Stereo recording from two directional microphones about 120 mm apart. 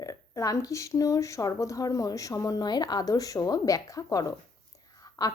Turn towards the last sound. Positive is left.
turn(degrees=30)  # may be behind; listen again after turning